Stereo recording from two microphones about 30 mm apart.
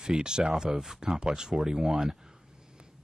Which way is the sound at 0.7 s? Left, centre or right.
Centre.